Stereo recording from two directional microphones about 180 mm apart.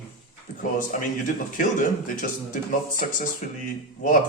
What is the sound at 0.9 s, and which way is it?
A man's voice, 45° left (ahead or behind).